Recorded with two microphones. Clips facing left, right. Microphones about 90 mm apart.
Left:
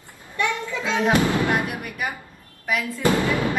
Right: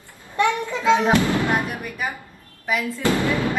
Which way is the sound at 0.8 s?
20° right (ahead or behind).